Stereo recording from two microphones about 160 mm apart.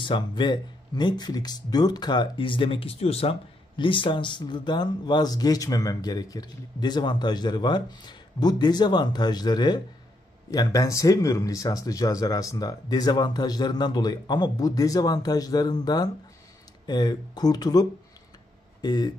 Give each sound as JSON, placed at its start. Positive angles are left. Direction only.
{"t": 0.0, "sound": "speech", "side_deg": 30}